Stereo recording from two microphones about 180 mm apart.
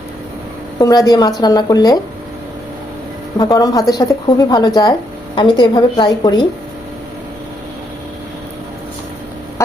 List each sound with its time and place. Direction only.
0.8 s a woman's voice: 20° left (ahead or behind)
3.3 s a woman's voice: 20° left (ahead or behind)
9.6 s chicken: 15° left (ahead or behind)